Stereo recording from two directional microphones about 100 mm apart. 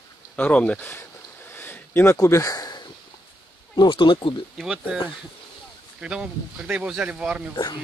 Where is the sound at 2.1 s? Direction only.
35° left (ahead or behind); by 4.4 s 55° left (ahead or behind).